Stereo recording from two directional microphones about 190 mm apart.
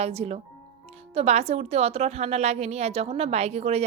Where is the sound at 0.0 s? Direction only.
30° right (ahead or behind).